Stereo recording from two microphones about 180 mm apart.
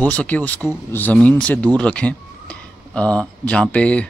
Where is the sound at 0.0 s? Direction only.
10° left (ahead or behind).